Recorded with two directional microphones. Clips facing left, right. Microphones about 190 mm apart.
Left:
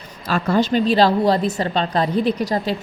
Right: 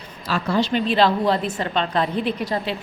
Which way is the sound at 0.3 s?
50° left (ahead or behind).